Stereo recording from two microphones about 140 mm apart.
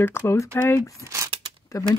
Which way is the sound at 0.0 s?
15° left (ahead or behind).